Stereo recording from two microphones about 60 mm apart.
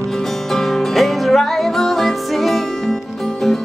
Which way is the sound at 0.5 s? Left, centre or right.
Centre.